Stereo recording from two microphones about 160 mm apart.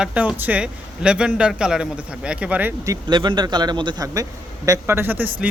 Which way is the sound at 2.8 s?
25° right (ahead or behind).